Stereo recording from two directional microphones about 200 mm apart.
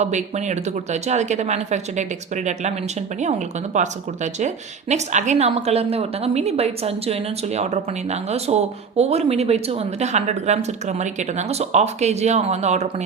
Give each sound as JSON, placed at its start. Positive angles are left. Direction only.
{"t": 0.0, "sound": "a woman's voice", "side_deg": -35}